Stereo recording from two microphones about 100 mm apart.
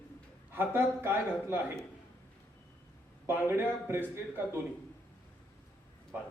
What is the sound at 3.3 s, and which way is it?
Speech, 20° right (ahead or behind).